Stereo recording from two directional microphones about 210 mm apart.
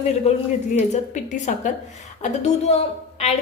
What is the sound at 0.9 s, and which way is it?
A woman's voice, 35° left (ahead or behind).